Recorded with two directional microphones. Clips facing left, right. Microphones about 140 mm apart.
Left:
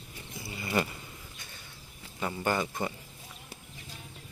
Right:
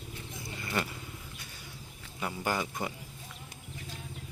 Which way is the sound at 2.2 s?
5° right (ahead or behind).